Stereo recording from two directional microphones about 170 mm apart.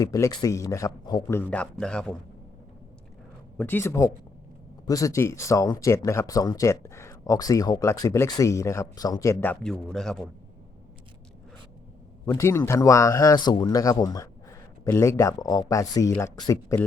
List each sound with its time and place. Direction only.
0.0 s speech: 20° left (ahead or behind)
1.4 s a man's voice: 10° left (ahead or behind)
3.6 s a man's voice: 10° left (ahead or behind)
12.2 s speech: 20° left (ahead or behind)